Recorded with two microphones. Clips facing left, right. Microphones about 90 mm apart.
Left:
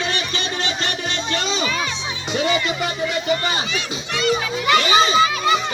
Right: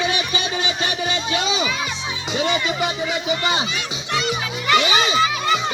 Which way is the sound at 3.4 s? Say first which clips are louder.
Right 1 dB; 20° right (ahead or behind).